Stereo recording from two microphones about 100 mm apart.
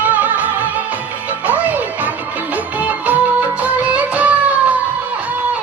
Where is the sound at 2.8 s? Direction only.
15° right (ahead or behind).